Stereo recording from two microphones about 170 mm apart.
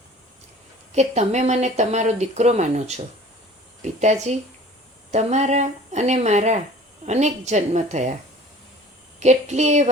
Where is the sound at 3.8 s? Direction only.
45° right (ahead or behind).